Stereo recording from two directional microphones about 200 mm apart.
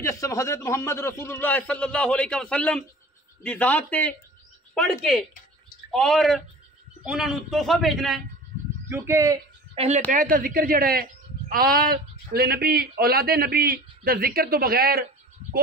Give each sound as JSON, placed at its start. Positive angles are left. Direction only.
{"t": 0.0, "sound": "a man's voice", "side_deg": 15}
{"t": 8.8, "sound": "a man's voice", "side_deg": -15}
{"t": 9.8, "sound": "a woman's voice", "side_deg": -35}